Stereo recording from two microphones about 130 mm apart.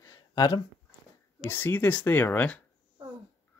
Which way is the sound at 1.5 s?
15° left (ahead or behind).